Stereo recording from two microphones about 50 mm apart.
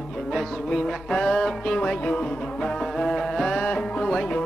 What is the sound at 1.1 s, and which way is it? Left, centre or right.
Music, centre.